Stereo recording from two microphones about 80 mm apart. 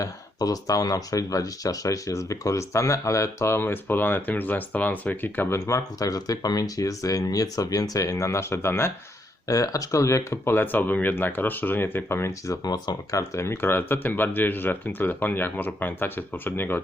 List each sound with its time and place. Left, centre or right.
0.0 s speech: left
5.5 s speech: left
9.5 s speech: left
12.6 s speech: left